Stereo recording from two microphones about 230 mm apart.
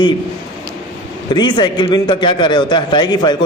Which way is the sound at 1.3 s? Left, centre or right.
Centre.